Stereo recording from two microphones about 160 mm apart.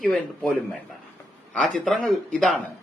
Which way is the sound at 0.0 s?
Centre (ahead or behind).